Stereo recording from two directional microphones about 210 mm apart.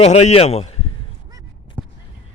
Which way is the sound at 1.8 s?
10° right (ahead or behind).